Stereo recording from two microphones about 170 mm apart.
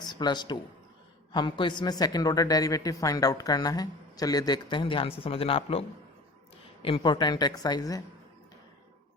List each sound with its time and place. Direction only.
0.0 s a man's voice: 25° left (ahead or behind)
6.8 s speech: 30° left (ahead or behind)